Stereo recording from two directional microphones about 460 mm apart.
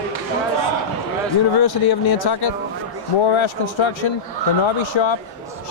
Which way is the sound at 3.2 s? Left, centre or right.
Left.